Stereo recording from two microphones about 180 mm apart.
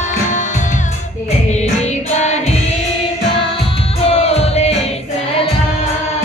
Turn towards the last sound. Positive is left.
turn(degrees=35)  # may be behind; listen again after turning